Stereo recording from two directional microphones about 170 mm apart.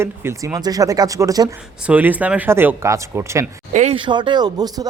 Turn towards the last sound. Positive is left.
turn(degrees=-25)  # may be behind; listen again after turning